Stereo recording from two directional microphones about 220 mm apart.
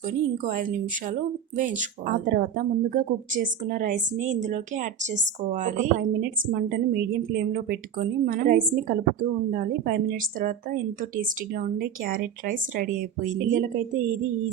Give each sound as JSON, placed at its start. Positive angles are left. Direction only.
{"t": 0.4, "sound": "speech", "side_deg": -35}
{"t": 6.0, "sound": "a woman's voice", "side_deg": -45}